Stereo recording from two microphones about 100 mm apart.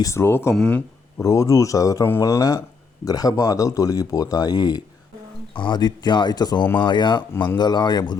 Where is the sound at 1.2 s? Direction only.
30° left (ahead or behind).